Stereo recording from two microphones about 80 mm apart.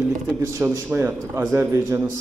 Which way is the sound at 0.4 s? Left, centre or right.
Right.